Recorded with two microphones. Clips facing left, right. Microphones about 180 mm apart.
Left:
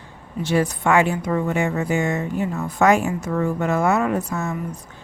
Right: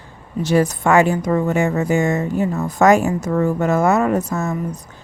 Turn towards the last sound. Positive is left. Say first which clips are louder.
# right 4 dB
turn(degrees=-40)  # may be behind; listen again after turning